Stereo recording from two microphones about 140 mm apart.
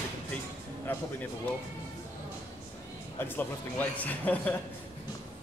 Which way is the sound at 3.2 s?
15° left (ahead or behind).